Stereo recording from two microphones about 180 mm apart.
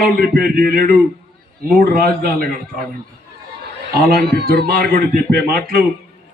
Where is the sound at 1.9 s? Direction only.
55° right (ahead or behind).